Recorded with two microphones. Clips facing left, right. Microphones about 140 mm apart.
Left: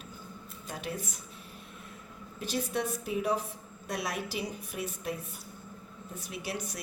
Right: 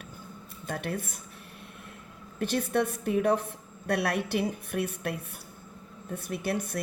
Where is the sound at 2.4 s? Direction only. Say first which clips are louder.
Right 6 dB; 60° right (ahead or behind).